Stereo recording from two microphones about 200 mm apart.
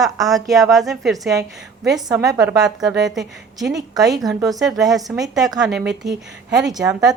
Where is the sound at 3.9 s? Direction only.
20° right (ahead or behind).